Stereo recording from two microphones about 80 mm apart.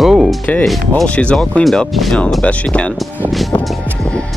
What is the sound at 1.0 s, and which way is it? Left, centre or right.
Speech, centre.